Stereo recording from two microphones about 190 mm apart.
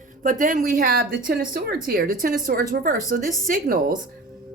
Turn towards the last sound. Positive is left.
turn(degrees=-45)  # may be behind; listen again after turning